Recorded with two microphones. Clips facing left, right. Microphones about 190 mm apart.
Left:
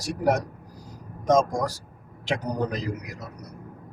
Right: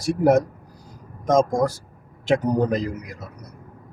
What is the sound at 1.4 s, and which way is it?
A man's voice, 50° right (ahead or behind).